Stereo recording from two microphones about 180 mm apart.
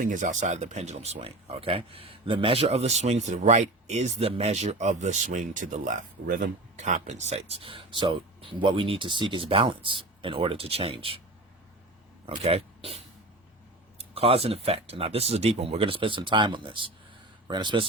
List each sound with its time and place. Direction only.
0.0 s speech: 45° right (ahead or behind)
6.7 s speech: 45° right (ahead or behind)
12.3 s speech: 35° right (ahead or behind)
14.0 s speech: 35° right (ahead or behind)